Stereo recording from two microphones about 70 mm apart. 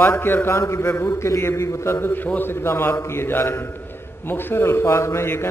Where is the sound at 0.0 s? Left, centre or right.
Left.